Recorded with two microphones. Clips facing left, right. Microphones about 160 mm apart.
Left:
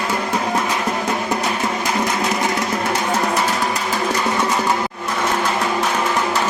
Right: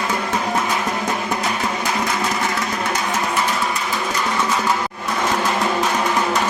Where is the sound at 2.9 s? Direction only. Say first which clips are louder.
Left 3 dB; 30° left (ahead or behind).